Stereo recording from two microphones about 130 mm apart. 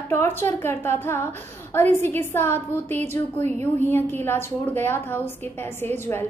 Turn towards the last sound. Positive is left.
turn(degrees=15)  # may be behind; listen again after turning